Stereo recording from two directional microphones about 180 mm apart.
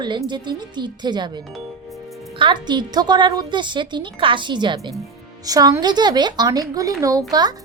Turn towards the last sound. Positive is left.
turn(degrees=-20)  # may be behind; listen again after turning